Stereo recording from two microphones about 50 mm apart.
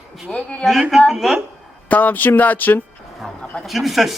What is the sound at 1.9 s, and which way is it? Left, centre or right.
Speech, left.